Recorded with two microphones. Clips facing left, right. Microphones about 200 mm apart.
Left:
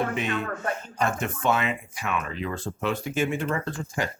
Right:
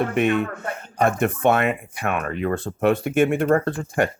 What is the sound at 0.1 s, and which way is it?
Speech, 60° right (ahead or behind).